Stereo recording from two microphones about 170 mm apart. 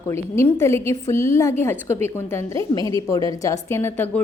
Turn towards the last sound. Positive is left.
turn(degrees=10)  # may be behind; listen again after turning